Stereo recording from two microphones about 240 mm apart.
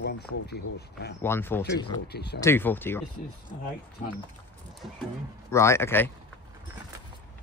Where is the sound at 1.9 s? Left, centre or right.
Left.